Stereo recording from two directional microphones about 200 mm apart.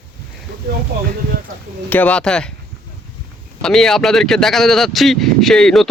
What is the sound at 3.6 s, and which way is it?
Speech, centre (ahead or behind).